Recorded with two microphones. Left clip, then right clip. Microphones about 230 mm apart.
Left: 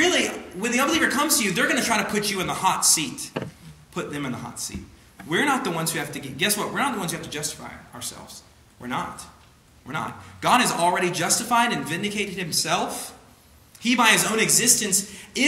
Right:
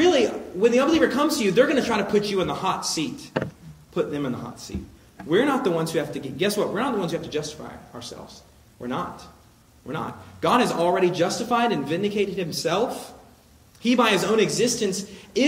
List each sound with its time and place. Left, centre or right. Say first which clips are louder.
0.0 s speech: right 2 dB; left
8.8 s speech: even; left